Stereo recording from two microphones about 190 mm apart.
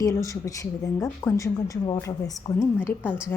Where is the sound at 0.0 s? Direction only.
15° left (ahead or behind).